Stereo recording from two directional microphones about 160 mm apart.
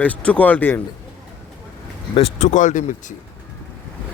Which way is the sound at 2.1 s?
40° left (ahead or behind).